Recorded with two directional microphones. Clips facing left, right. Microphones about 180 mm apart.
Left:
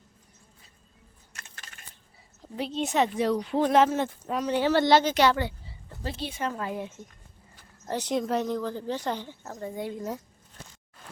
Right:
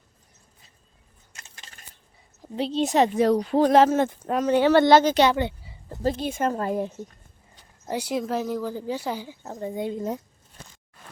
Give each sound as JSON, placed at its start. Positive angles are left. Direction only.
{"t": 1.4, "sound": "typing", "side_deg": -25}
{"t": 2.6, "sound": "speech", "side_deg": -30}
{"t": 5.1, "sound": "a sound", "side_deg": -20}
{"t": 6.0, "sound": "speech", "side_deg": -45}
{"t": 7.5, "sound": "speech", "side_deg": -10}
{"t": 9.5, "sound": "speech", "side_deg": -20}